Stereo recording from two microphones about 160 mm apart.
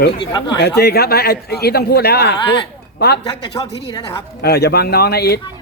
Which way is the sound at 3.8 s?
35° left (ahead or behind).